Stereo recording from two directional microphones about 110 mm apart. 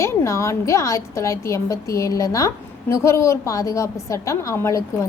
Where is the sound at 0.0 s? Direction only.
30° left (ahead or behind).